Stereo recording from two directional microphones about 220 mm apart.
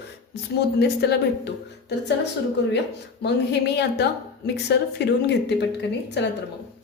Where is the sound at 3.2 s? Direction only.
50° left (ahead or behind).